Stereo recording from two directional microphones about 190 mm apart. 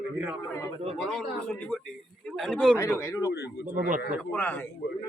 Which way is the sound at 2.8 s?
15° left (ahead or behind).